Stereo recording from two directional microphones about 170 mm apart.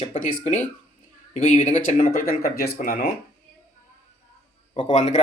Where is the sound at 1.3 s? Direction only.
50° left (ahead or behind).